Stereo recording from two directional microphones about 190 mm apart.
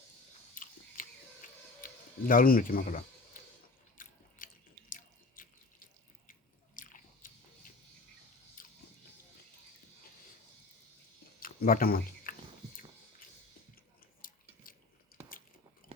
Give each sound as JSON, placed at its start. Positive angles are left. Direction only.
{"t": 0.5, "sound": "biting", "side_deg": 45}
{"t": 1.4, "sound": "music", "side_deg": 45}
{"t": 1.8, "sound": "speech", "side_deg": 45}
{"t": 3.3, "sound": "a sound", "side_deg": 45}
{"t": 4.9, "sound": "water", "side_deg": 45}
{"t": 6.7, "sound": "biting", "side_deg": 45}
{"t": 11.3, "sound": "a sound", "side_deg": 50}
{"t": 14.2, "sound": "chewing", "side_deg": 45}